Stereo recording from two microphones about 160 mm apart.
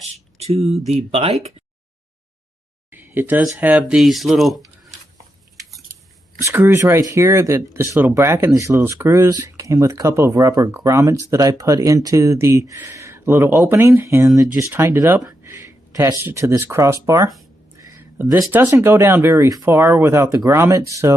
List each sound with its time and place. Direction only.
0.0 s speech: 40° right (ahead or behind)
2.9 s speech: 10° right (ahead or behind)
6.4 s speech: 15° right (ahead or behind)
17.7 s a sound: 20° right (ahead or behind)
18.5 s speech: 15° right (ahead or behind)